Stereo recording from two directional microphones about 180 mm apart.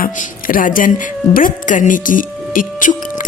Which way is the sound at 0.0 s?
50° left (ahead or behind).